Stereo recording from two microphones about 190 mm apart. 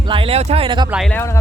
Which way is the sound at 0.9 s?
Centre (ahead or behind).